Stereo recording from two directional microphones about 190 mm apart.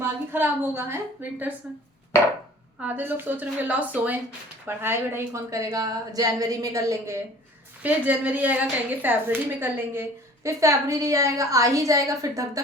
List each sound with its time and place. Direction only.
0.3 s a woman's voice: 10° right (ahead or behind)
2.8 s a woman's voice: 10° right (ahead or behind)